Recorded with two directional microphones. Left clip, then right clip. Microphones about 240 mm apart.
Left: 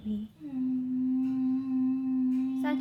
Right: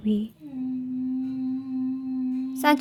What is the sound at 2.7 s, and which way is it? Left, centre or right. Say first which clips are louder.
Music: right 16 dB; right.